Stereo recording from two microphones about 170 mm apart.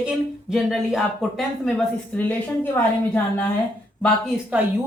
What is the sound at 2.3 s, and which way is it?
Speech, 10° left (ahead or behind).